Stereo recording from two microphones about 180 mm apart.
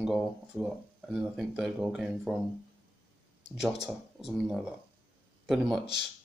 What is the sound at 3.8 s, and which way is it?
Speech, centre (ahead or behind).